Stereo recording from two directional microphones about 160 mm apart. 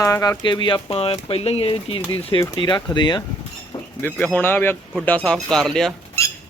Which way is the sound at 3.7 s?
25° left (ahead or behind).